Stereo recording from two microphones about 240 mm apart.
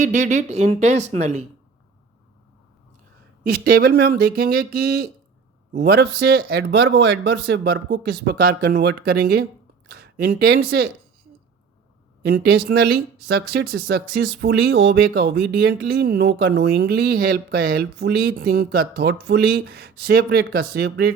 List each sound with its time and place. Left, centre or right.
0.0 s speech: right
3.5 s speech: right
12.2 s speech: right